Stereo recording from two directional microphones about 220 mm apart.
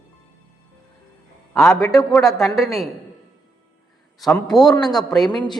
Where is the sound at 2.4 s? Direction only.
Centre (ahead or behind).